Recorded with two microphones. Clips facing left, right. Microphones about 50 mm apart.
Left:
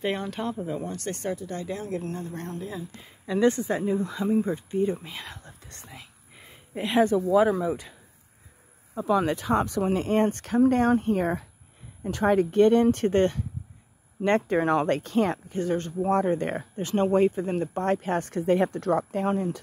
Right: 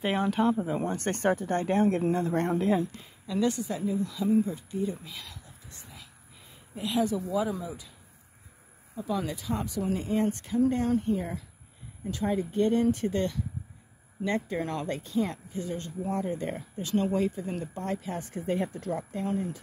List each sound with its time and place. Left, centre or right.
0.0 s speech: centre
0.7 s speech: right
2.1 s speech: right
3.3 s speech: left
5.4 s whispering: left
8.9 s speech: left
12.0 s speech: left
14.2 s speech: left
14.6 s speech: left
14.9 s speech: left